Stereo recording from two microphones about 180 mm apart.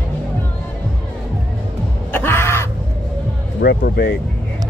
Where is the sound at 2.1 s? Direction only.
10° left (ahead or behind).